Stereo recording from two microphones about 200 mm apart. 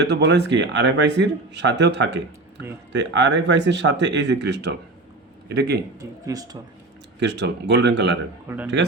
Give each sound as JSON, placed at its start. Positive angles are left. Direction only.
{"t": 0.0, "sound": "speech", "side_deg": -55}
{"t": 6.0, "sound": "speech", "side_deg": -15}
{"t": 7.2, "sound": "speech", "side_deg": -60}
{"t": 8.4, "sound": "speech", "side_deg": -10}